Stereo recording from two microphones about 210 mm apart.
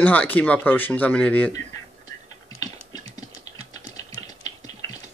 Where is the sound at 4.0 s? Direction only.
15° left (ahead or behind).